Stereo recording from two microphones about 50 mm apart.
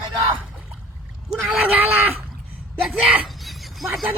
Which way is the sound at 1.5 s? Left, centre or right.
Right.